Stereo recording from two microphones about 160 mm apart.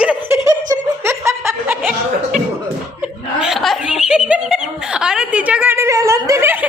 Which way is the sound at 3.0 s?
5° right (ahead or behind).